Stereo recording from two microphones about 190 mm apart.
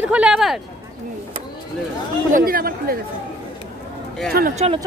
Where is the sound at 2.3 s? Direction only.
50° right (ahead or behind).